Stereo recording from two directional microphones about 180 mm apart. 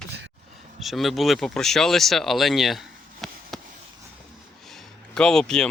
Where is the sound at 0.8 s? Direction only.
Centre (ahead or behind).